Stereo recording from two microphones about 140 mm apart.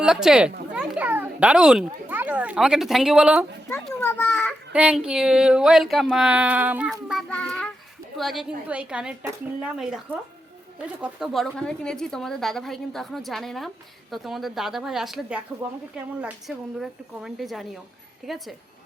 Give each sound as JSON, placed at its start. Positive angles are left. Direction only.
{"t": 0.0, "sound": "a woman's voice", "side_deg": -5}
{"t": 4.0, "sound": "children playing", "side_deg": 10}
{"t": 4.7, "sound": "speech", "side_deg": -10}
{"t": 7.1, "sound": "child singing", "side_deg": 5}
{"t": 8.1, "sound": "a woman's voice", "side_deg": 0}
{"t": 11.0, "sound": "a woman's voice", "side_deg": 0}